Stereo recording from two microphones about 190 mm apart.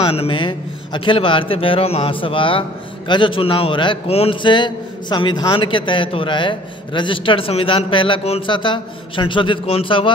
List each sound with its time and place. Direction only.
0.0 s a man's voice: 30° left (ahead or behind)